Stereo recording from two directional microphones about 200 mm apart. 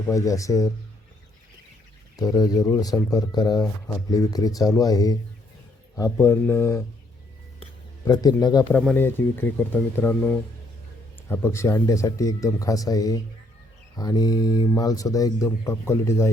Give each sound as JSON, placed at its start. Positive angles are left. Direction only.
{"t": 0.1, "sound": "speech", "side_deg": 15}
{"t": 2.1, "sound": "speech", "side_deg": 20}
{"t": 8.0, "sound": "speech", "side_deg": 20}